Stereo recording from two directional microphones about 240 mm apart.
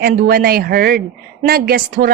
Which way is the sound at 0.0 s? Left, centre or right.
Right.